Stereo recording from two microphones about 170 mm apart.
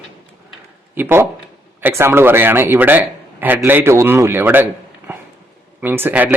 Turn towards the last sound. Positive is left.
turn(degrees=-10)  # may be behind; listen again after turning